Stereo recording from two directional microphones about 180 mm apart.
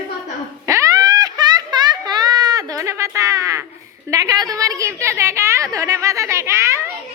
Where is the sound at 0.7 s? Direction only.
20° right (ahead or behind).